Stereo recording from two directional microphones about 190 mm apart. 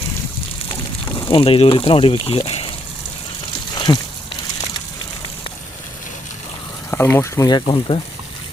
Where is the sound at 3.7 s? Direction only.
20° left (ahead or behind).